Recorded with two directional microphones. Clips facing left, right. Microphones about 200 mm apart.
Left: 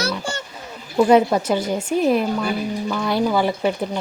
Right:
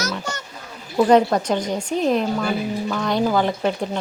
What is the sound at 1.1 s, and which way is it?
A woman's voice, 5° left (ahead or behind).